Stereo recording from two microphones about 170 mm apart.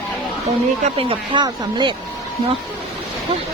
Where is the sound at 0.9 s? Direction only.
30° right (ahead or behind).